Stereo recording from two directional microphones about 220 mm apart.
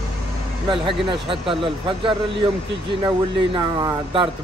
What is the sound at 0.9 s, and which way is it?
Speech, 25° right (ahead or behind).